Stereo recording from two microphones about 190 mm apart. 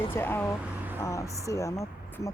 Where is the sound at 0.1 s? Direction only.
10° left (ahead or behind).